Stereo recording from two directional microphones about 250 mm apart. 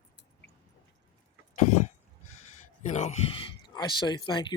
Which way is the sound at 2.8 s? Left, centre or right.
Left.